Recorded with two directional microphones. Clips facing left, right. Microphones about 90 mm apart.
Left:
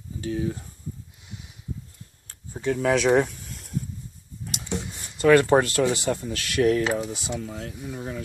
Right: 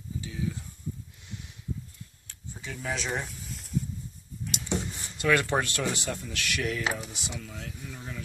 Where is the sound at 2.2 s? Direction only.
50° left (ahead or behind); by 3.3 s 70° left (ahead or behind).